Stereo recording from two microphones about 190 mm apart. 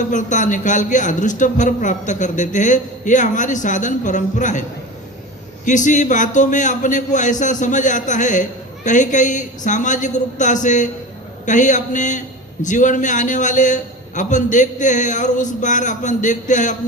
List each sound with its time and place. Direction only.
0.1 s speech: 40° left (ahead or behind)
5.6 s speech: 40° left (ahead or behind)